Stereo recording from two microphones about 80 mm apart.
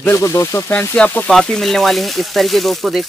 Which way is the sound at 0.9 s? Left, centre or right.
Centre.